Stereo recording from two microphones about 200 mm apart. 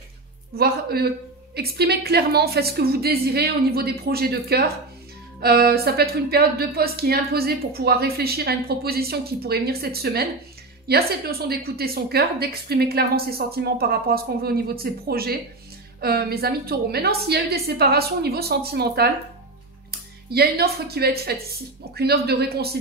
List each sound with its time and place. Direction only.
0.6 s speech: 50° right (ahead or behind)